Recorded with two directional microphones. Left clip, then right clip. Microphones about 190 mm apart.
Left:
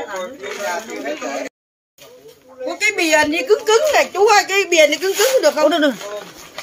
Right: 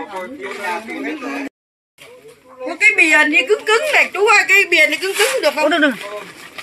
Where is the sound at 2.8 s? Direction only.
15° left (ahead or behind); by 5.6 s 35° left (ahead or behind).